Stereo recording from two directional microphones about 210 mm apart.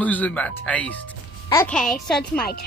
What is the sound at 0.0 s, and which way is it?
Speech, 5° left (ahead or behind).